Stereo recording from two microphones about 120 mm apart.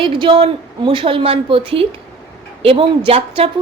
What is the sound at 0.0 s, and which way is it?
Speech, 45° right (ahead or behind).